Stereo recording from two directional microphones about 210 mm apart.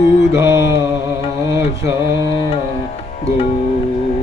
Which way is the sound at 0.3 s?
15° right (ahead or behind).